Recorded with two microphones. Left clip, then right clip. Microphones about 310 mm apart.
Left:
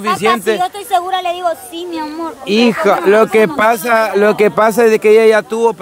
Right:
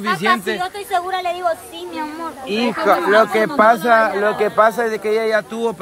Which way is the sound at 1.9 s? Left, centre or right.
Left.